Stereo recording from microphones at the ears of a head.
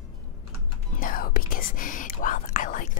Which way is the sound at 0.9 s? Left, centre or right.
Left.